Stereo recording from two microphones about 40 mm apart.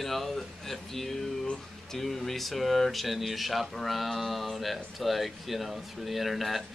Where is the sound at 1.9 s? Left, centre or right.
Centre.